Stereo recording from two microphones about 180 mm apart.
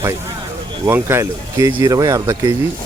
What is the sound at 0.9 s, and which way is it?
Speech, 15° right (ahead or behind).